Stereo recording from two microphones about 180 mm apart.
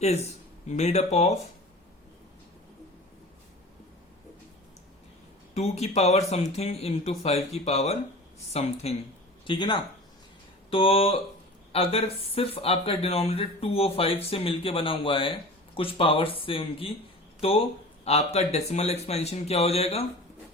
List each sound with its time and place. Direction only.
0.7 s speech: 40° left (ahead or behind)
5.5 s speech: 35° left (ahead or behind)